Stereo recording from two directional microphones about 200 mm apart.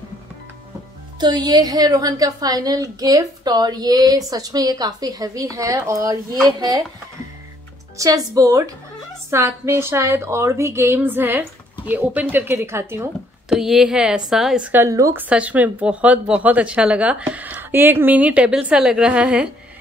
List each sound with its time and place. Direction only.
1.2 s a woman's voice: 20° right (ahead or behind)
8.0 s a woman's voice: 15° right (ahead or behind)
13.6 s a woman's voice: centre (ahead or behind)